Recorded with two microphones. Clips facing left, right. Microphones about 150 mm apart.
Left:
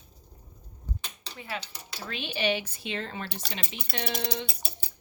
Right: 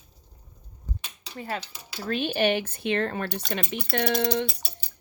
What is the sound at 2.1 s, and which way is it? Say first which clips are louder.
Speech: right 6 dB; 50° right (ahead or behind).